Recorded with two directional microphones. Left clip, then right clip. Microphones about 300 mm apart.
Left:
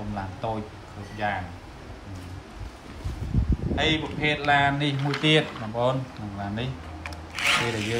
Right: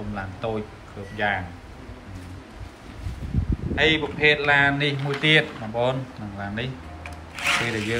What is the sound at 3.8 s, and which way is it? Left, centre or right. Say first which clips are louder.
Speech: right 5 dB; centre.